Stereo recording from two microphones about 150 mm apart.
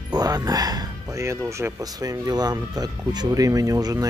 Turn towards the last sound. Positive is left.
turn(degrees=-20)  # may be behind; listen again after turning